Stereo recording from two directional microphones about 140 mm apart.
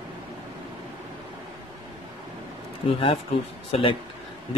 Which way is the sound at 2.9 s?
45° left (ahead or behind).